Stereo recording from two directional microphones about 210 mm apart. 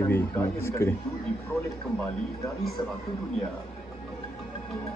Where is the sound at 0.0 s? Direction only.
10° left (ahead or behind).